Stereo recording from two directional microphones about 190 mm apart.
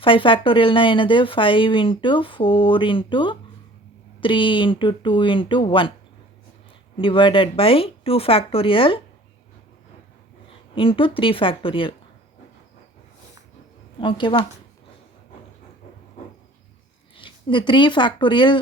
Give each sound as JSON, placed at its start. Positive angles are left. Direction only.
{"t": 0.0, "sound": "speech", "side_deg": 25}
{"t": 6.9, "sound": "speech", "side_deg": 25}
{"t": 10.8, "sound": "speech", "side_deg": 25}
{"t": 14.0, "sound": "speech", "side_deg": 25}
{"t": 17.2, "sound": "a woman's voice", "side_deg": 25}